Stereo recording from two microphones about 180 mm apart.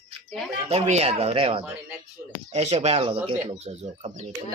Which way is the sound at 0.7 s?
35° right (ahead or behind).